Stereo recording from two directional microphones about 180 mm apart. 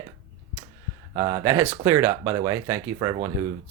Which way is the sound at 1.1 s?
20° right (ahead or behind).